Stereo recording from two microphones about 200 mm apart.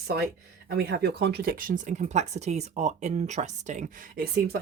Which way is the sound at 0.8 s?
55° right (ahead or behind).